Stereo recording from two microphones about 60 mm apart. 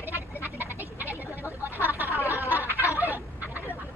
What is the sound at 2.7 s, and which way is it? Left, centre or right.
Fowl, left.